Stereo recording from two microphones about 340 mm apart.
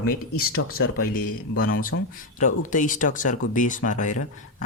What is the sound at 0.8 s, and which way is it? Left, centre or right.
Speech, left.